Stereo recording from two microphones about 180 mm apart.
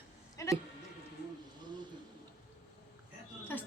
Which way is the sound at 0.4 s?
20° left (ahead or behind).